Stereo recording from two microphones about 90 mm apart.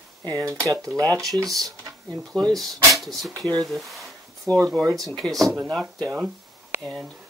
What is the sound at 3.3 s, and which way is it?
Speech, 50° right (ahead or behind).